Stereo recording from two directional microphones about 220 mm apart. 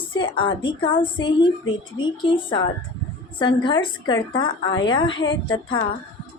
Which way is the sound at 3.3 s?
20° left (ahead or behind).